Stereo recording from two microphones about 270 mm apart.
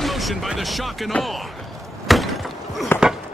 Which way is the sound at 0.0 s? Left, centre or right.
Centre.